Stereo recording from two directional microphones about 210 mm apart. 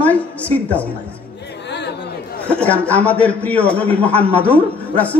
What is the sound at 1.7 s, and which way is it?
Chatter, 55° left (ahead or behind).